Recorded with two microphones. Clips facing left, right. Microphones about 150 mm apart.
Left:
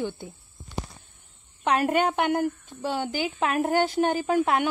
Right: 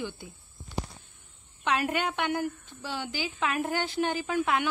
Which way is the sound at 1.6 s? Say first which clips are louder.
Left 6 dB; 40° left (ahead or behind).